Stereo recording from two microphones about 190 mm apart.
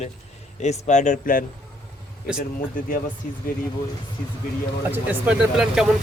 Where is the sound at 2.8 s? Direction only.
45° left (ahead or behind).